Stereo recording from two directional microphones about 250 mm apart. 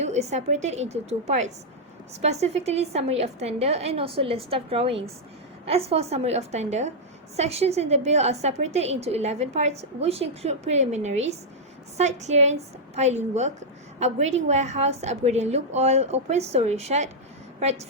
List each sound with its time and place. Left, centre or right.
0.0 s a woman's voice: right